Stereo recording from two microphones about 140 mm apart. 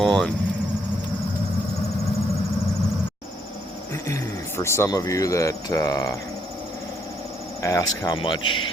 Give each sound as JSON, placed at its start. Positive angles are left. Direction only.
{"t": 0.0, "sound": "speech", "side_deg": 0}
{"t": 4.0, "sound": "speech", "side_deg": 20}
{"t": 7.6, "sound": "speech", "side_deg": 20}
{"t": 8.1, "sound": "speech", "side_deg": 35}